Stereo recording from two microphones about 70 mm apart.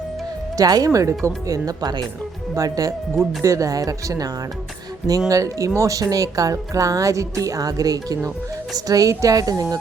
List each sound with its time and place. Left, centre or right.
0.5 s speech: right
0.9 s speech: right
2.6 s speech: right
5.3 s speech: right